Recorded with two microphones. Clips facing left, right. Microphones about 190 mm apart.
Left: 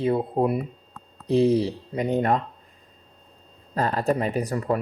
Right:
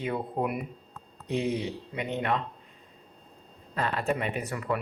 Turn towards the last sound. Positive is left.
turn(degrees=35)  # may be behind; listen again after turning